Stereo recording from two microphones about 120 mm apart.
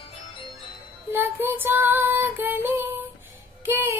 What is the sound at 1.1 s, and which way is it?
Female singing, 15° right (ahead or behind).